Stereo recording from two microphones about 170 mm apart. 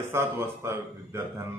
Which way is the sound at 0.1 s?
15° right (ahead or behind).